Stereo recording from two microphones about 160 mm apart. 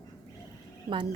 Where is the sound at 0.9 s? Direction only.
30° right (ahead or behind).